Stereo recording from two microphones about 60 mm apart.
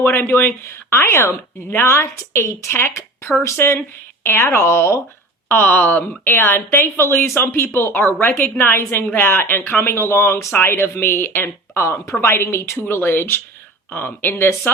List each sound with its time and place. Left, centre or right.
0.0 s speech: left
5.5 s speech: left